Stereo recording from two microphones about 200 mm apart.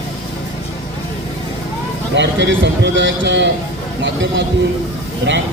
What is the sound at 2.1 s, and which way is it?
A man's voice, 65° right (ahead or behind).